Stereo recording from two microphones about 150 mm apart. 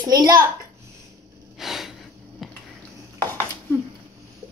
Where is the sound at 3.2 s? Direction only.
15° left (ahead or behind).